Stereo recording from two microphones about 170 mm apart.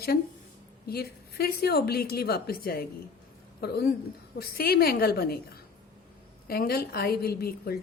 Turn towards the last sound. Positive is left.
turn(degrees=65)  # may be behind; listen again after turning